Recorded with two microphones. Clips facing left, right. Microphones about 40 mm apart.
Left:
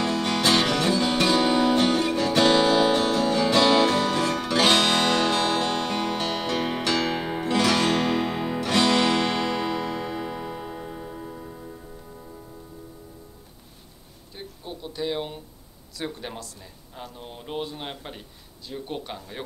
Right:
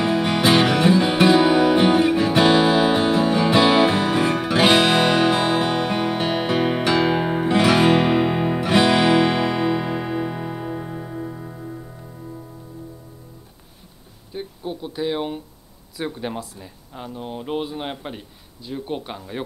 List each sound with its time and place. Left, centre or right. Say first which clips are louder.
0.0 s music: right 4 dB; centre
14.3 s a sound: right 8 dB; centre
16.0 s speech: right 6 dB; centre